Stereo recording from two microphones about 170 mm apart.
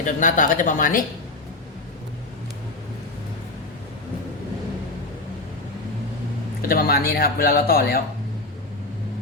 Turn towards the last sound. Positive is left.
turn(degrees=65)  # may be behind; listen again after turning